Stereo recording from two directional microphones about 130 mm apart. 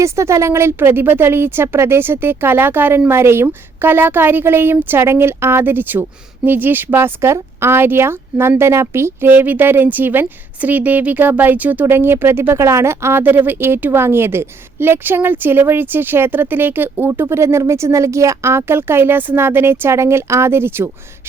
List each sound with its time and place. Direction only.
0.0 s a woman's voice: 20° right (ahead or behind)